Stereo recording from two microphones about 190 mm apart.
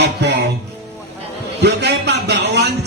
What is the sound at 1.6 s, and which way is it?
A man's voice, 65° right (ahead or behind).